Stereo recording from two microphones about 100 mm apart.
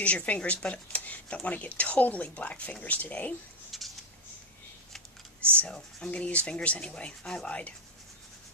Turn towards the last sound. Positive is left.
turn(degrees=10)  # may be behind; listen again after turning